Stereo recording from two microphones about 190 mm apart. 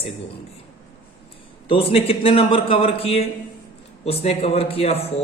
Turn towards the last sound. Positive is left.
turn(degrees=30)  # may be behind; listen again after turning